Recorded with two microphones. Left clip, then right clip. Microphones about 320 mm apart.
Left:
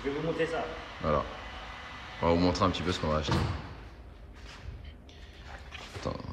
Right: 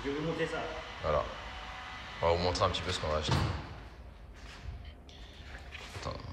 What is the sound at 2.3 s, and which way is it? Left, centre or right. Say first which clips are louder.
A man's voice: left 3 dB; centre.